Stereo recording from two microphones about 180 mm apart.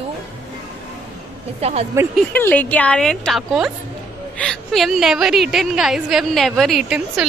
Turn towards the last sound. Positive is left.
turn(degrees=0)  # may be behind; listen again after turning